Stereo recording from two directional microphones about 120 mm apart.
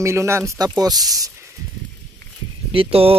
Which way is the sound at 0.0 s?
25° right (ahead or behind).